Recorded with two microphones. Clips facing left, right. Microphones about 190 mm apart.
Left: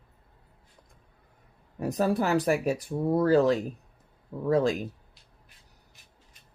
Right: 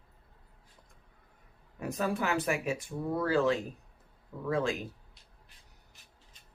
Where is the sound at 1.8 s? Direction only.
35° left (ahead or behind).